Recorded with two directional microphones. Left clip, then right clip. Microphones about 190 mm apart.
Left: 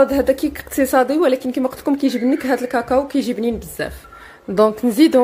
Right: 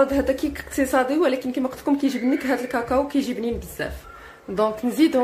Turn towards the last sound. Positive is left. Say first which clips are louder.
# left 6 dB
turn(degrees=40)  # may be behind; listen again after turning